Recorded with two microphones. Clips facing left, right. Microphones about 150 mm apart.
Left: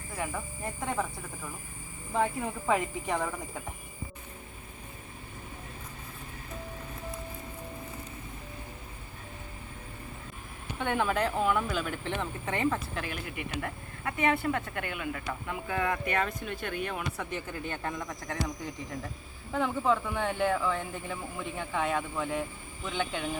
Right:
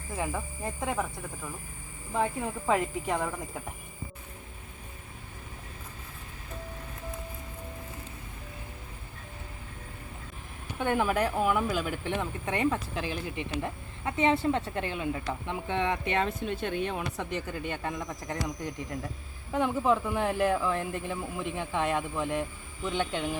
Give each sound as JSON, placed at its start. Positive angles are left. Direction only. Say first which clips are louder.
{"t": 0.2, "sound": "a woman's voice", "louder": "right 2 dB", "side_deg": -20}
{"t": 0.8, "sound": "speech", "louder": "right 1 dB", "side_deg": -5}
{"t": 2.1, "sound": "speech", "louder": "even", "side_deg": -5}
{"t": 10.8, "sound": "speech", "louder": "right 2 dB", "side_deg": -10}
{"t": 12.9, "sound": "a woman's voice", "louder": "right 3 dB", "side_deg": -25}
{"t": 17.5, "sound": "speech", "louder": "right 1 dB", "side_deg": -5}